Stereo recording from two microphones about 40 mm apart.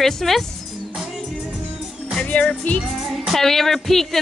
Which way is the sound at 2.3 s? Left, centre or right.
Left.